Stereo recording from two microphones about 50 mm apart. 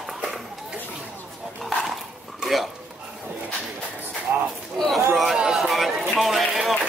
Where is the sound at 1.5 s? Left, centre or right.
Centre.